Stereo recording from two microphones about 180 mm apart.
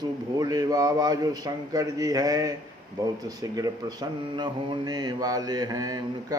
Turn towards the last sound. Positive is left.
turn(degrees=-20)  # may be behind; listen again after turning